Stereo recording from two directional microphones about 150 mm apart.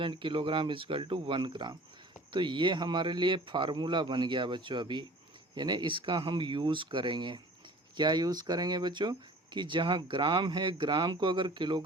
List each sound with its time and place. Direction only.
0.0 s speech: 35° right (ahead or behind)